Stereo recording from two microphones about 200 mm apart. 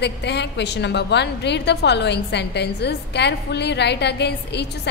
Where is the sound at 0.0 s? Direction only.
60° left (ahead or behind).